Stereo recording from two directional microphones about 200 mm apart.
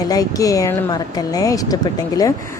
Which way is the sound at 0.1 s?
15° left (ahead or behind).